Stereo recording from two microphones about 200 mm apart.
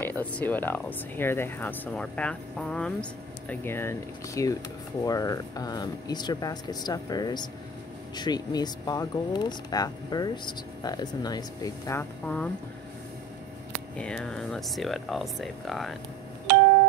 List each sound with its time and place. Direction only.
0.0 s speech: 10° left (ahead or behind)
13.9 s speech: 5° left (ahead or behind)
16.5 s doorbell: 60° right (ahead or behind)